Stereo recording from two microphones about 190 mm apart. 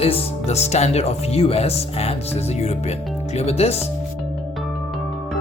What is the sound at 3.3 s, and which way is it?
Speech, 35° left (ahead or behind).